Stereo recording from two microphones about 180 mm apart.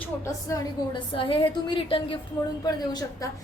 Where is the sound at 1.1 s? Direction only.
30° left (ahead or behind).